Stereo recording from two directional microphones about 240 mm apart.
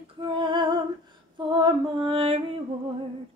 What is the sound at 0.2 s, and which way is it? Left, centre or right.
Music, centre.